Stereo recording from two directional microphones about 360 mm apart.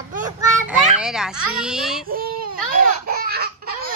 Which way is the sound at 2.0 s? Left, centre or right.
Right.